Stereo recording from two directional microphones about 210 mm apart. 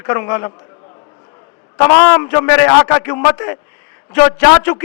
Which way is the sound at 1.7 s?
15° left (ahead or behind).